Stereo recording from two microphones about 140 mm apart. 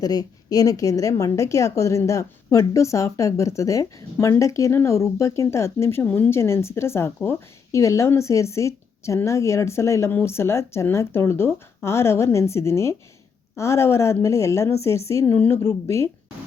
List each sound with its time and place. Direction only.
0.0 s a woman's voice: 25° left (ahead or behind)